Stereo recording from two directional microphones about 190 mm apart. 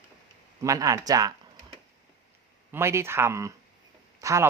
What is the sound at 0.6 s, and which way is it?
Speech, 15° right (ahead or behind).